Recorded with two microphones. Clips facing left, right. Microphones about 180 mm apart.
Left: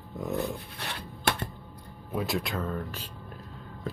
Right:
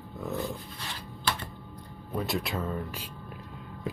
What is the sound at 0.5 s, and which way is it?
Dog, 65° left (ahead or behind).